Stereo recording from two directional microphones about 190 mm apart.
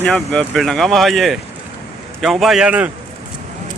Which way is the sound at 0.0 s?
5° left (ahead or behind).